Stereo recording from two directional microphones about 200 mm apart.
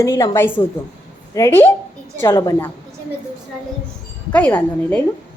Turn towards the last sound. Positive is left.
turn(degrees=10)  # may be behind; listen again after turning